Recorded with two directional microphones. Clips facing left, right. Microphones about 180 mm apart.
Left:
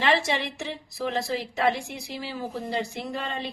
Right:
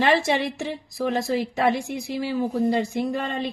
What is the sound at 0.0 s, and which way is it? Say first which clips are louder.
A woman's voice: right 4 dB; 45° right (ahead or behind).